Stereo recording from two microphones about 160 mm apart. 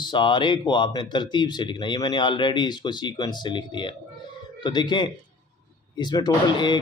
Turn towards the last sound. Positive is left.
turn(degrees=25)  # may be behind; listen again after turning